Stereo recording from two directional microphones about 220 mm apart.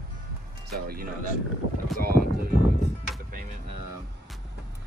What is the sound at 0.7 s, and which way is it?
Speech, 45° right (ahead or behind).